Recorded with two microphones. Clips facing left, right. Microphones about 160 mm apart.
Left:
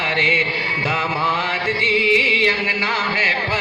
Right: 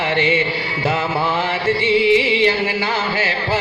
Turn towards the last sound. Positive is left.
turn(degrees=-40)  # may be behind; listen again after turning